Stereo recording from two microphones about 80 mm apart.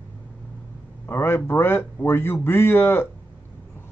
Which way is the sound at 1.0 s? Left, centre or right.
Left.